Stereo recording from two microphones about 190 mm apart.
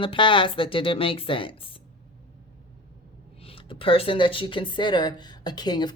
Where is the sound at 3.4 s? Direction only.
30° left (ahead or behind).